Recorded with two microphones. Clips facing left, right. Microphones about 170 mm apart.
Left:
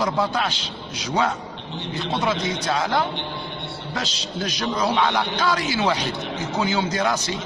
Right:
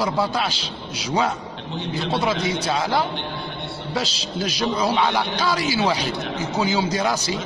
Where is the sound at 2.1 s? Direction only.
10° right (ahead or behind).